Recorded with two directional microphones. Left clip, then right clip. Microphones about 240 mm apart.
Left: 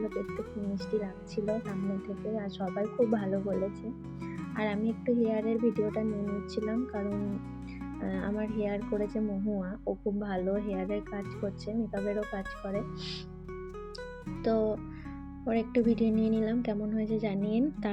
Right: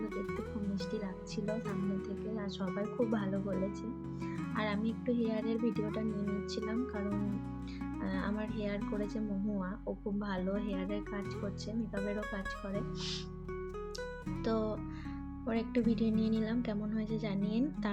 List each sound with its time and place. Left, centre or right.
0.0 s speech: centre
2.3 s a woman's voice: centre
2.6 s speech: centre
4.5 s a woman's voice: centre
8.5 s a woman's voice: centre
8.8 s speech: centre
14.3 s music: centre
15.4 s a woman's voice: centre